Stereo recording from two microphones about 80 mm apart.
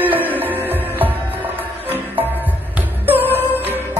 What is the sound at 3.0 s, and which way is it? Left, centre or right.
Music, right.